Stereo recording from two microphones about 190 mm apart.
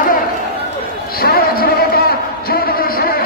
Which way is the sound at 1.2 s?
50° left (ahead or behind).